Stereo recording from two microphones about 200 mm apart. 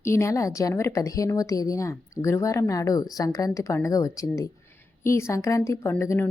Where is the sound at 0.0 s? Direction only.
15° left (ahead or behind).